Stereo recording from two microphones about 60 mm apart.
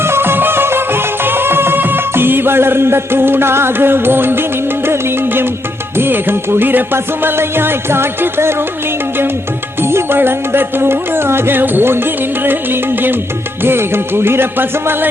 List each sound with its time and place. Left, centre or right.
0.0 s music: right
9.8 s music: right